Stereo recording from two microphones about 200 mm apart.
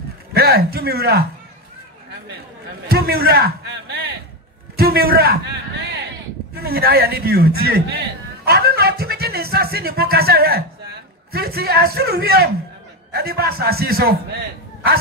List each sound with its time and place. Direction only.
0.3 s a man's voice: 50° right (ahead or behind)
2.9 s a man's voice: 50° right (ahead or behind)
4.7 s a man's voice: 50° right (ahead or behind)
6.5 s a man's voice: 50° right (ahead or behind)